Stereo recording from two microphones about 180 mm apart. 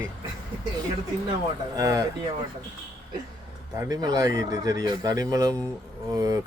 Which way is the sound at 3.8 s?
20° right (ahead or behind).